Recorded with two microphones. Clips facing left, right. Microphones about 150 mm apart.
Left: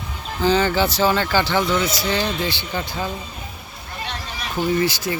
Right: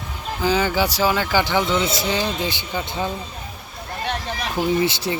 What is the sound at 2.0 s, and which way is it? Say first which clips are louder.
Speech: left 1 dB; 15° right (ahead or behind).